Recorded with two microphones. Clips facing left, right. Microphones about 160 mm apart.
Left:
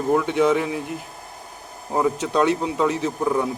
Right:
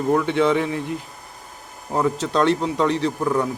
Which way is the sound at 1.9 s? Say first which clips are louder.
Even; 10° left (ahead or behind).